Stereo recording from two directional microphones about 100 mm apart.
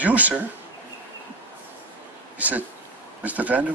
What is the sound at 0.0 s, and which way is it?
Speech, 15° right (ahead or behind).